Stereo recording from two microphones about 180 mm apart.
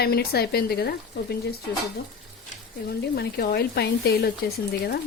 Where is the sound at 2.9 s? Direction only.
60° left (ahead or behind).